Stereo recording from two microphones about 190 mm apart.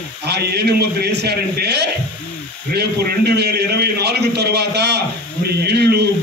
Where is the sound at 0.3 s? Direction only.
55° right (ahead or behind).